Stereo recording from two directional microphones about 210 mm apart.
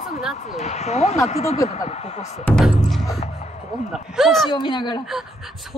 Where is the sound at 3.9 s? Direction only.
Centre (ahead or behind).